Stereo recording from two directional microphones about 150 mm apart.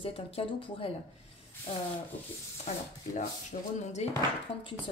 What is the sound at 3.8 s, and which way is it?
Speech, 45° left (ahead or behind).